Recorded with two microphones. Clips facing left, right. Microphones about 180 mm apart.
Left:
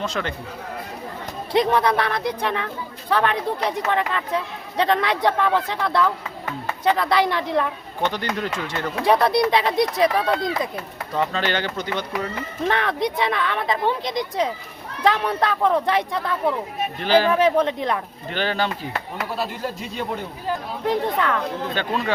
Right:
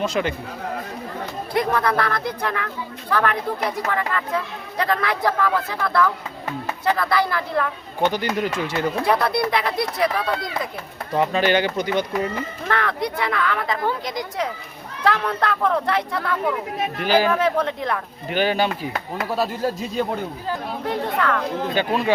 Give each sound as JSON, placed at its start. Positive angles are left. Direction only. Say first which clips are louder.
{"t": 0.0, "sound": "speech", "louder": "right 4 dB", "side_deg": -10}
{"t": 1.5, "sound": "speech", "louder": "left 2 dB", "side_deg": 20}
{"t": 8.0, "sound": "speech", "louder": "right 3 dB", "side_deg": -10}
{"t": 9.0, "sound": "speech", "louder": "left 6 dB", "side_deg": 20}
{"t": 11.1, "sound": "speech", "louder": "right 4 dB", "side_deg": -15}
{"t": 12.6, "sound": "speech", "louder": "left 3 dB", "side_deg": 20}
{"t": 17.0, "sound": "speech", "louder": "left 1 dB", "side_deg": -10}
{"t": 17.3, "sound": "speech", "louder": "left 3 dB", "side_deg": 20}
{"t": 18.3, "sound": "speech", "louder": "right 4 dB", "side_deg": -10}
{"t": 19.1, "sound": "speech", "louder": "right 6 dB", "side_deg": -40}
{"t": 20.8, "sound": "speech", "louder": "left 2 dB", "side_deg": 20}
{"t": 21.8, "sound": "speech", "louder": "right 4 dB", "side_deg": -10}